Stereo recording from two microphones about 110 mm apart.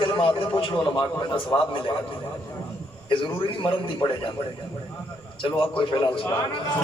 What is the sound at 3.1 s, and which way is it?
A man's voice, 50° left (ahead or behind).